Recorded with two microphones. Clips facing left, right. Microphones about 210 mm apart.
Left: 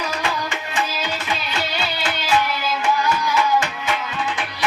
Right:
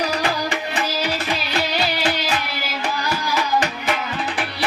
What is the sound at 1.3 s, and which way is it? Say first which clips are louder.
Music: right 3 dB; 35° right (ahead or behind).